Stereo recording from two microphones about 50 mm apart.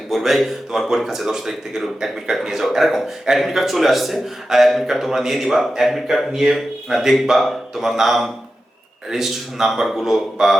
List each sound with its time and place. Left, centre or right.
0.1 s a man's voice: centre